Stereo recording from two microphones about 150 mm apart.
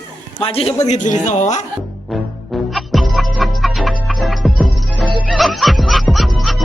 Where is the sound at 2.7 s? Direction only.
Centre (ahead or behind).